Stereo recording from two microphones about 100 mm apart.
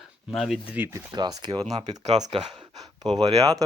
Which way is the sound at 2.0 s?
90° right.